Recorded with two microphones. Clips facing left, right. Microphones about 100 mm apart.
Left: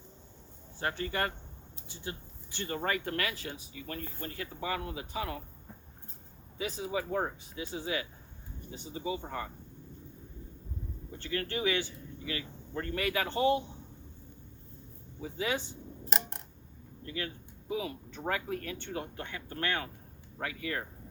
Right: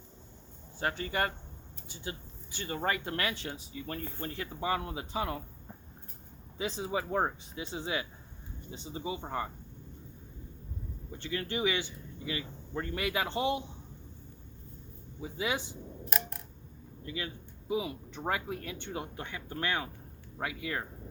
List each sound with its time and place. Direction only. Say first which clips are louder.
0.8 s speech: right 1 dB; 20° right (ahead or behind)
6.6 s speech: right 1 dB; 30° right (ahead or behind)
11.2 s speech: even; 20° right (ahead or behind)
15.2 s speech: even; 15° right (ahead or behind)
17.1 s speech: even; 20° right (ahead or behind)